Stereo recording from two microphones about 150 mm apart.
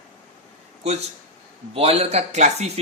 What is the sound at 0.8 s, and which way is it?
A man's voice, 45° right (ahead or behind).